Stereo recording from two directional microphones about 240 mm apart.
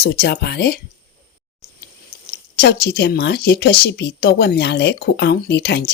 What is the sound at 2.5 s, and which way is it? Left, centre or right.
Speech, left.